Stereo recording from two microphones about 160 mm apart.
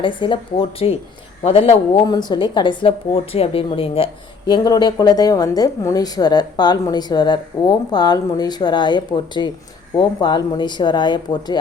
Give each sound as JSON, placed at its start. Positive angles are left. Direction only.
{"t": 0.0, "sound": "speech", "side_deg": 30}
{"t": 2.0, "sound": "a woman's voice", "side_deg": 25}